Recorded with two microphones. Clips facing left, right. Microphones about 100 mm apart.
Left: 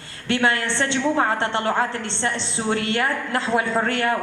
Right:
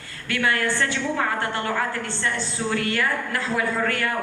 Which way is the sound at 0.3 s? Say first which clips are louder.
Left 2 dB; 25° left (ahead or behind).